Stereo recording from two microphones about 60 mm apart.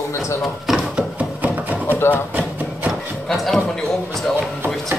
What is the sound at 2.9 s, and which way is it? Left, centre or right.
Speech, centre.